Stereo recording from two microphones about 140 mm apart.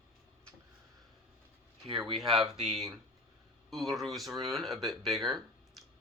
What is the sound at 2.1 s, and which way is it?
Speech, centre (ahead or behind).